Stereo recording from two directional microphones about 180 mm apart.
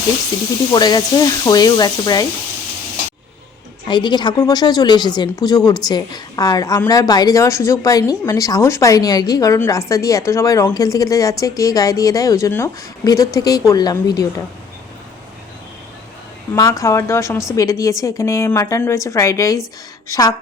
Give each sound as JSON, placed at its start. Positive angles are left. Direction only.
{"t": 0.7, "sound": "a woman's voice", "side_deg": 20}
{"t": 3.8, "sound": "a woman's voice", "side_deg": 25}
{"t": 16.6, "sound": "a woman's voice", "side_deg": 20}